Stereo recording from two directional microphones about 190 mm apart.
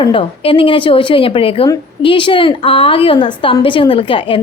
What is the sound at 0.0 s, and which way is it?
A woman's voice, 25° left (ahead or behind).